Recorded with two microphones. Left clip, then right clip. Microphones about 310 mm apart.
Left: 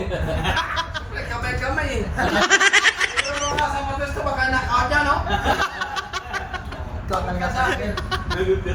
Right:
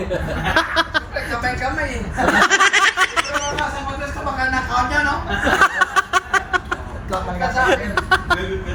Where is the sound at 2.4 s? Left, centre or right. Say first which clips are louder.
Right 1 dB; centre.